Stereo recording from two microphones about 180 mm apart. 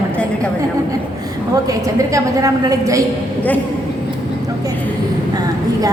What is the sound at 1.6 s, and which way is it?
A woman's voice, 20° right (ahead or behind).